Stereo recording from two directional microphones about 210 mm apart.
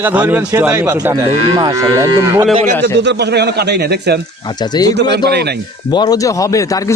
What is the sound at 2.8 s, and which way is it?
A man's voice, 55° right (ahead or behind).